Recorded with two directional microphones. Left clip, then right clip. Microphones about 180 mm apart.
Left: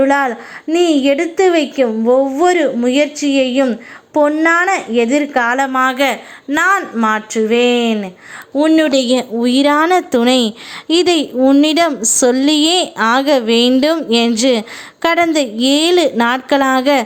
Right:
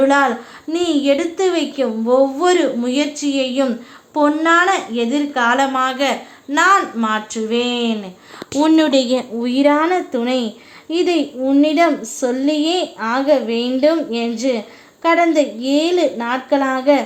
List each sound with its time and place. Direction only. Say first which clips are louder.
0.0 s a child's voice: left 1 dB; 30° left (ahead or behind)
8.5 s speech: left 2 dB; 5° left (ahead or behind)
8.9 s a child's voice: left 2 dB; 20° left (ahead or behind); by 17.0 s 40° left (ahead or behind)